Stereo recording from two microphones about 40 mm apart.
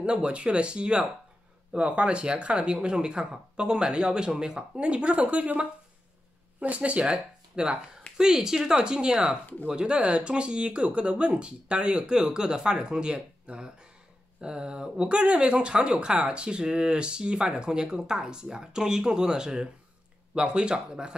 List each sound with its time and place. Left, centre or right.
0.0 s speech: right